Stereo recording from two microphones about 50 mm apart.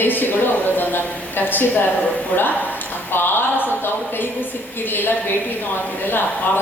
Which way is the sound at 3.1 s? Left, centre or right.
Left.